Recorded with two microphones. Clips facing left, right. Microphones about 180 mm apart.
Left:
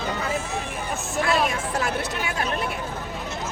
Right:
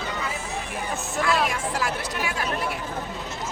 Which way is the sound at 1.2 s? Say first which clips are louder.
Left 1 dB; 25° left (ahead or behind).